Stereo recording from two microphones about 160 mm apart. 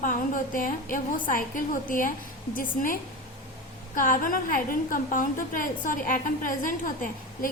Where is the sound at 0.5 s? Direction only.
60° left (ahead or behind).